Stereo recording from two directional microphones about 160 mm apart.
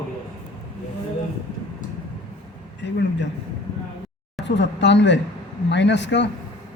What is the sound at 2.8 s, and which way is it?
Speech, 90° left.